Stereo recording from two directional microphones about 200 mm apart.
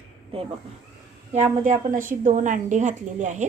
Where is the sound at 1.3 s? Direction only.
35° right (ahead or behind).